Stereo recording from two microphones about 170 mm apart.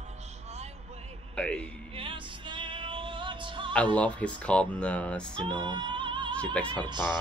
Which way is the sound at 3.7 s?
10° left (ahead or behind).